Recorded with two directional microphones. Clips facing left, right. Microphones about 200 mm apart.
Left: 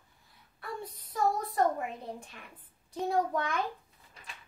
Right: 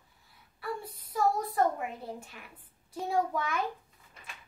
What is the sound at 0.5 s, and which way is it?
Speech, 5° right (ahead or behind).